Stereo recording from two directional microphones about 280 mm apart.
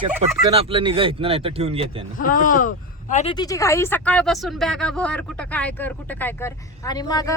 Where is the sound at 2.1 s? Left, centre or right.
Left.